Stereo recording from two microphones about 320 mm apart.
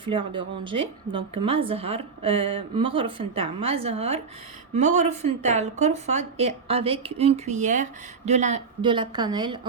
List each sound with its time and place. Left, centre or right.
0.0 s a woman's voice: centre